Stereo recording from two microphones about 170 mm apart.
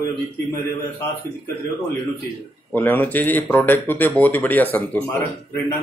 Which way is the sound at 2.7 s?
10° left (ahead or behind).